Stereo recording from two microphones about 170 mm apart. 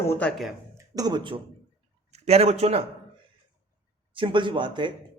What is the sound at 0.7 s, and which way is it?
Speech, 20° right (ahead or behind).